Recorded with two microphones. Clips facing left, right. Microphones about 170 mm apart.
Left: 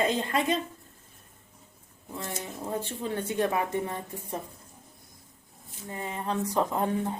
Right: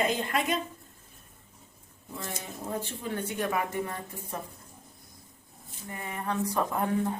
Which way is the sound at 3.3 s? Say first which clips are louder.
Left 3 dB; 25° left (ahead or behind).